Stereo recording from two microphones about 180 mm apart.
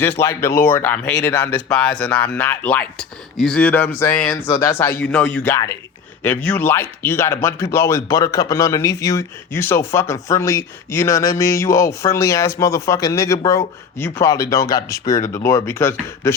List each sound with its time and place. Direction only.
0.0 s speech: 15° left (ahead or behind)